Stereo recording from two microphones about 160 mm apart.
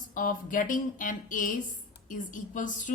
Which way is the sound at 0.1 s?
55° left (ahead or behind).